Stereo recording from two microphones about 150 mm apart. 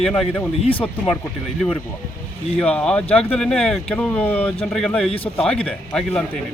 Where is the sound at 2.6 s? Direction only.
5° left (ahead or behind).